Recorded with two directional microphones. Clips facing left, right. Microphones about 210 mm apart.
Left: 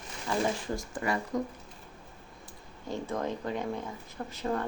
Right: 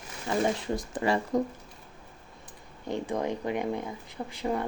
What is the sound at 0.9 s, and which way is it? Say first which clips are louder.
Speech: right 5 dB; 25° right (ahead or behind).